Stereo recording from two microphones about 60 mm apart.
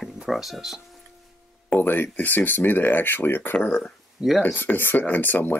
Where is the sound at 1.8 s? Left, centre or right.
Left.